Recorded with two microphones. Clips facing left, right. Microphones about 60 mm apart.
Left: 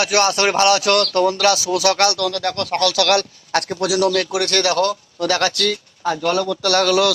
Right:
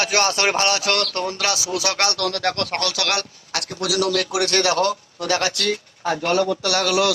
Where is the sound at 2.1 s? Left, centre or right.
Right.